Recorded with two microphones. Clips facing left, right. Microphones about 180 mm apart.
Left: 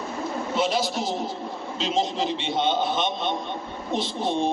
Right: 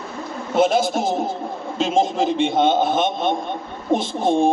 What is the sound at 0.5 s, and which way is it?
Speech, 50° right (ahead or behind).